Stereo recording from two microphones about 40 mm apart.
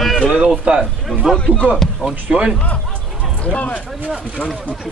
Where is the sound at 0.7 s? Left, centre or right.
Right.